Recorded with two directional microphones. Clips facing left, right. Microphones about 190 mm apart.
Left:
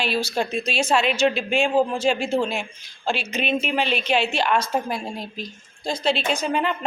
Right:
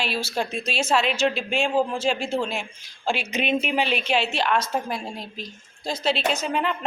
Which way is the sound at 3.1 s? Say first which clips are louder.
Even; 15° right (ahead or behind).